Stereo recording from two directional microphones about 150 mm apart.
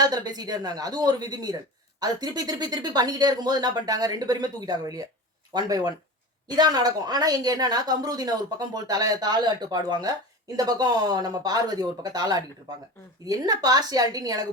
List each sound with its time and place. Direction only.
0.0 s a woman's voice: 25° right (ahead or behind)